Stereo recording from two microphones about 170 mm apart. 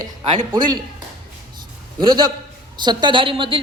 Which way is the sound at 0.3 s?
25° right (ahead or behind).